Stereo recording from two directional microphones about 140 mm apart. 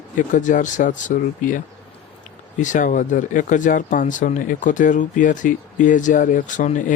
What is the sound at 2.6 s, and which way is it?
Speech, 65° left (ahead or behind).